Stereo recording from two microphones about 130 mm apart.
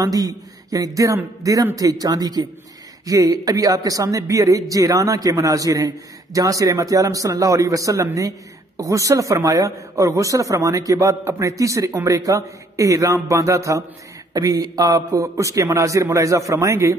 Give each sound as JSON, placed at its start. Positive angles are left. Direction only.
{"t": 0.0, "sound": "speech", "side_deg": -30}